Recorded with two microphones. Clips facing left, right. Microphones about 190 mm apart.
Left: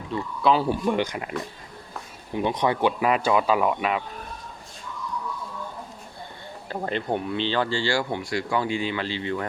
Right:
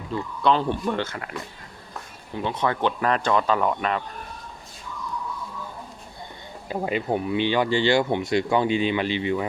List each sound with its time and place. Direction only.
0.1 s speech: 5° left (ahead or behind)
2.3 s speech: 15° left (ahead or behind)
6.7 s speech: 10° right (ahead or behind)